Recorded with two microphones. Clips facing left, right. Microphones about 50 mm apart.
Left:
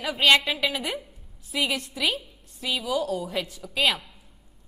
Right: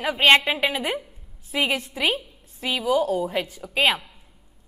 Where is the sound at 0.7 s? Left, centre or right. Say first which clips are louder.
Right 4 dB; right.